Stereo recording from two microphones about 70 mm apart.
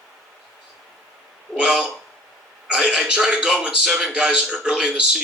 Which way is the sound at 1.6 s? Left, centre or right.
Centre.